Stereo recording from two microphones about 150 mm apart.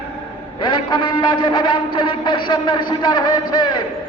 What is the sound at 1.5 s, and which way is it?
A man's voice, 35° left (ahead or behind).